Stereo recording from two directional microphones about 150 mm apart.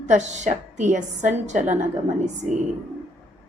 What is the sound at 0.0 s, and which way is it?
A woman's voice, 50° right (ahead or behind).